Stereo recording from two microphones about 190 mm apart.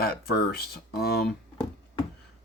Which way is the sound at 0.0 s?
55° left (ahead or behind).